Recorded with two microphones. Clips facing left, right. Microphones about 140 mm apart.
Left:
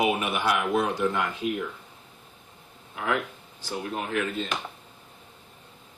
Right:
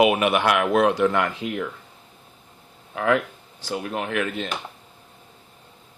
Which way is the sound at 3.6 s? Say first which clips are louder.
Right 4 dB; 90° right.